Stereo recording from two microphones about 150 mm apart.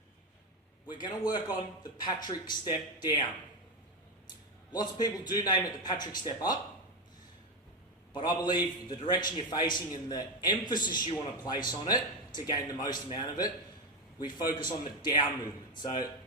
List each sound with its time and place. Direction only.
1.3 s a man's voice: 30° left (ahead or behind)
4.7 s a man's voice: 25° left (ahead or behind)
8.1 s a man's voice: 30° left (ahead or behind)